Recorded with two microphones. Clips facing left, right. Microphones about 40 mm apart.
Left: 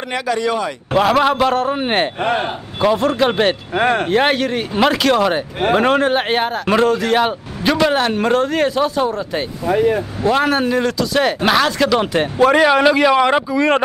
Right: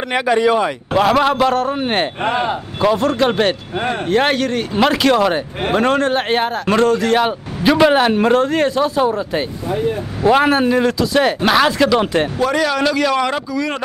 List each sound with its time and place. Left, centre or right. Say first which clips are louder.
0.1 s speech: right 4 dB; right
0.9 s speech: even; centre
3.7 s speech: left 5 dB; left
4.1 s speech: even; centre
7.7 s speech: right 3 dB; centre
9.7 s speech: left 6 dB; left
10.2 s speech: right 3 dB; centre
12.4 s a man's voice: left 9 dB; left